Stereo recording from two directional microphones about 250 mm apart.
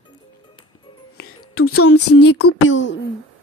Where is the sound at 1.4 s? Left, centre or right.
Left.